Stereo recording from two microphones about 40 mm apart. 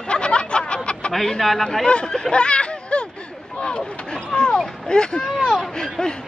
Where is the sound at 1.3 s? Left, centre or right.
Centre.